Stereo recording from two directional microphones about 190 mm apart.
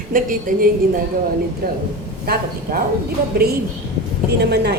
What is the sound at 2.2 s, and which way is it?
Speech, 50° right (ahead or behind).